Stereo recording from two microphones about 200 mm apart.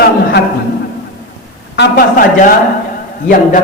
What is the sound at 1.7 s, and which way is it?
Speech, 55° left (ahead or behind).